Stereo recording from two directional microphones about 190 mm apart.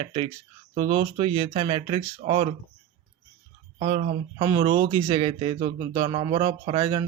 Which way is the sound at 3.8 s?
35° right (ahead or behind).